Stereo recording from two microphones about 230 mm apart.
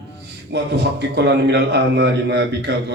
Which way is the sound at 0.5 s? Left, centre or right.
Right.